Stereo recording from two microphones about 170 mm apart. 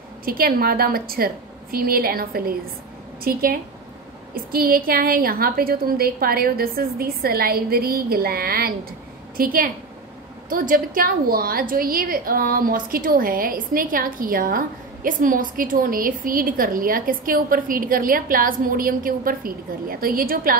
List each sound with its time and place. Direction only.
0.2 s a woman's voice: 60° right (ahead or behind)